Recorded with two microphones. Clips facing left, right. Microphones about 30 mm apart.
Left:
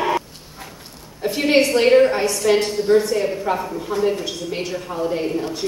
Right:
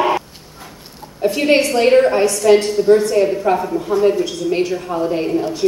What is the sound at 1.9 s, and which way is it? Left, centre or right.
A woman's voice, centre.